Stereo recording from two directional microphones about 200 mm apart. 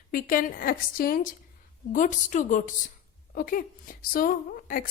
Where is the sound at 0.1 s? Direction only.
45° left (ahead or behind).